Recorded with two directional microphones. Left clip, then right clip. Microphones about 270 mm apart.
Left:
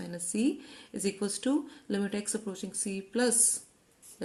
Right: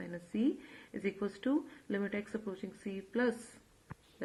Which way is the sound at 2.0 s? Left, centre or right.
Left.